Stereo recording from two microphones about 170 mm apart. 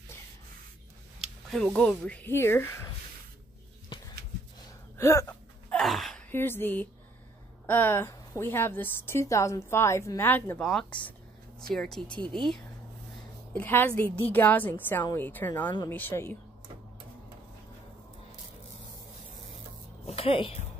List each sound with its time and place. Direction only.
1.2 s speech: 5° left (ahead or behind)
4.9 s a sound: 15° left (ahead or behind)
5.7 s a sound: centre (ahead or behind)
6.3 s a woman's voice: 15° left (ahead or behind)
13.5 s a woman's voice: 10° left (ahead or behind)
20.1 s speech: 35° left (ahead or behind)